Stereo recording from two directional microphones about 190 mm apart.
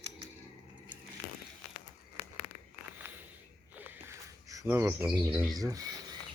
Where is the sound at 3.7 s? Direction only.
10° right (ahead or behind).